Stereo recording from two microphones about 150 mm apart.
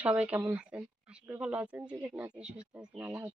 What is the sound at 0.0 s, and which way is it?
Speech, 10° right (ahead or behind).